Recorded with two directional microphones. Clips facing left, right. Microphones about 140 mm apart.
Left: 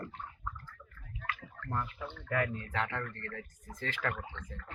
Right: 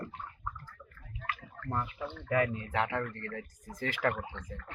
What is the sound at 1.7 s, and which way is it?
Speech, 15° right (ahead or behind).